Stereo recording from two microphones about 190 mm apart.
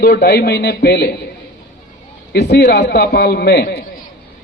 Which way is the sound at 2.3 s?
60° left (ahead or behind).